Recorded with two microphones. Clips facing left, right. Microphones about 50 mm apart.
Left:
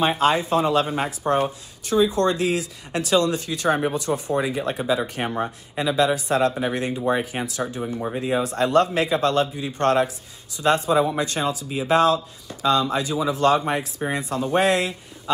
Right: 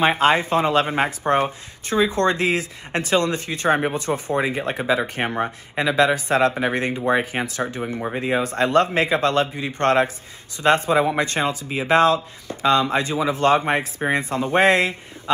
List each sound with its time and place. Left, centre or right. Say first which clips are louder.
0.0 s speech: right 2 dB; right